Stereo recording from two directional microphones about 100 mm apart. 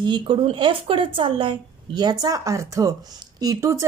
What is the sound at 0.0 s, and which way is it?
A woman's voice, 55° right (ahead or behind).